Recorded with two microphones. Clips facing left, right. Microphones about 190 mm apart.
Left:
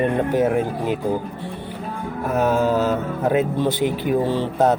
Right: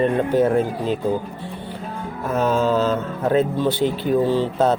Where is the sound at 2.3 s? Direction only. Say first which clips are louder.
Even; 15° left (ahead or behind).